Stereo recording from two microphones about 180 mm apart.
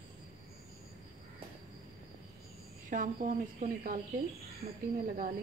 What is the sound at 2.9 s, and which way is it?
Speech, 45° right (ahead or behind).